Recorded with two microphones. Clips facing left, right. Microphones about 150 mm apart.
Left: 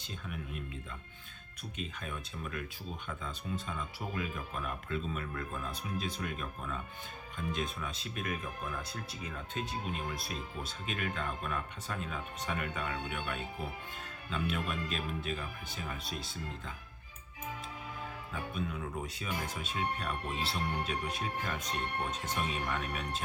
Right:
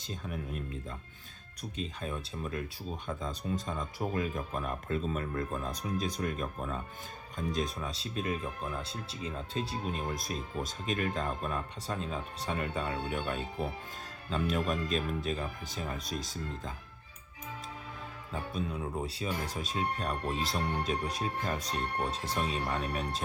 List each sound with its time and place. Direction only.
0.0 s speech: 35° right (ahead or behind)
18.3 s speech: 35° right (ahead or behind)